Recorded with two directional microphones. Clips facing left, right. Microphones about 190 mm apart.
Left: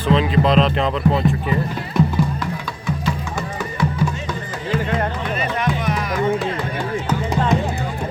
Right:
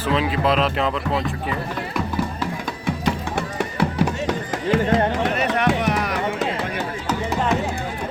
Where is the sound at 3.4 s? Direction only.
65° right (ahead or behind).